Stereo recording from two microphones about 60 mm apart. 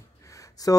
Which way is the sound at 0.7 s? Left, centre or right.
Left.